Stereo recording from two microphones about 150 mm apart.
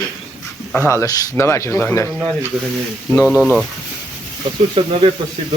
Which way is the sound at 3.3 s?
5° left (ahead or behind).